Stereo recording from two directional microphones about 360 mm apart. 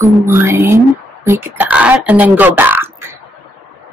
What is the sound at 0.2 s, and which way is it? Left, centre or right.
Speech, centre.